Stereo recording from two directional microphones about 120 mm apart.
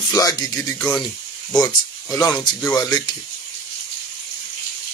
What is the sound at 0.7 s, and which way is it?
Speech, 10° left (ahead or behind).